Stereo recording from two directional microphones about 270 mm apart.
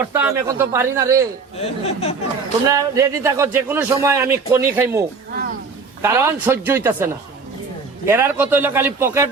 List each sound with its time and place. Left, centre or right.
0.1 s a man's voice: centre
1.5 s speech: left
2.6 s a man's voice: centre